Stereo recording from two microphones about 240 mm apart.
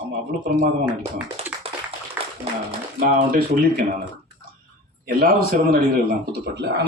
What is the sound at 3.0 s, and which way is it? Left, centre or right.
Speech, right.